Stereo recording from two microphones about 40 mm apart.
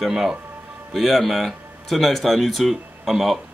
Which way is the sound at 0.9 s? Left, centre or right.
Centre.